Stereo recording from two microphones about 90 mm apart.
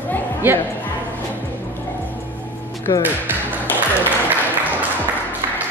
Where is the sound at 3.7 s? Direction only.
20° left (ahead or behind).